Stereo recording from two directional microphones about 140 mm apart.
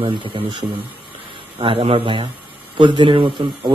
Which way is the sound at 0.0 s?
40° right (ahead or behind).